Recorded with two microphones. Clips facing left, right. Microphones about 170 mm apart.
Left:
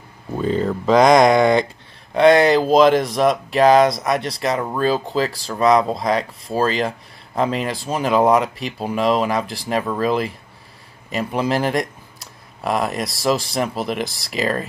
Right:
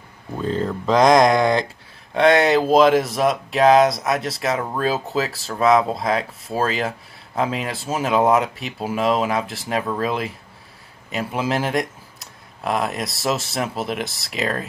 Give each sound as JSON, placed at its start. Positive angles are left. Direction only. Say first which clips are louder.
{"t": 0.4, "sound": "speech", "louder": "left 3 dB", "side_deg": 5}